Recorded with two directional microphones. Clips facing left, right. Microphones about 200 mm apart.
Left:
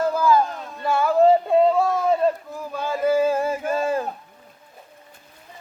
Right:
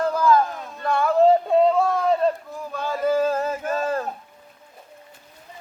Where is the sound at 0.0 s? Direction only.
5° left (ahead or behind).